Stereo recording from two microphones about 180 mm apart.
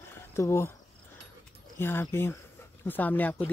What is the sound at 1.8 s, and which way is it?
Speech, 15° left (ahead or behind).